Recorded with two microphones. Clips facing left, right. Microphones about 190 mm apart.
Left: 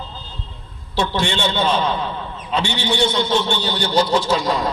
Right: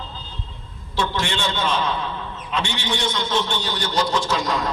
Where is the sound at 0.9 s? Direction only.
35° left (ahead or behind).